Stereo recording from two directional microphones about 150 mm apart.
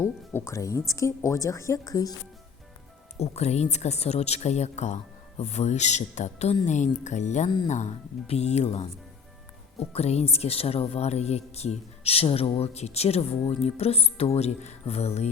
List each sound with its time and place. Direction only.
0.0 s speech: 20° left (ahead or behind)
3.2 s a woman's voice: 45° left (ahead or behind)
9.9 s a woman's voice: 45° left (ahead or behind)